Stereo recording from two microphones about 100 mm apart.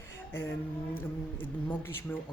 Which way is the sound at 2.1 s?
20° left (ahead or behind).